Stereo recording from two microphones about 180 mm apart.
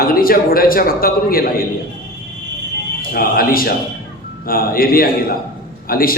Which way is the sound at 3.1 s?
55° left (ahead or behind).